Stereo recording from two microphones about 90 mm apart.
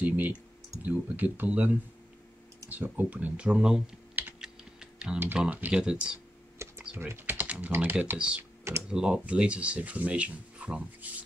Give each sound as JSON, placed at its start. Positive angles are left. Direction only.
{"t": 0.0, "sound": "speech", "side_deg": -20}
{"t": 4.1, "sound": "typing", "side_deg": -20}
{"t": 4.4, "sound": "typing", "side_deg": -10}
{"t": 5.4, "sound": "speech", "side_deg": -15}
{"t": 6.6, "sound": "computer keyboard", "side_deg": -30}
{"t": 7.0, "sound": "speech", "side_deg": -20}